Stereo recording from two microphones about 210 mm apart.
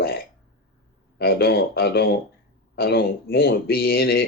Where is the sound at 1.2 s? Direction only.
45° left (ahead or behind).